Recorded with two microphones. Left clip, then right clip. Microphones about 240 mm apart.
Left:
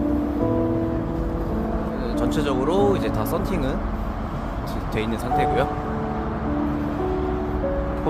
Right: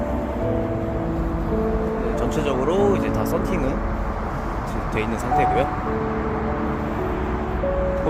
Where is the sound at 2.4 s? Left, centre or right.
Centre.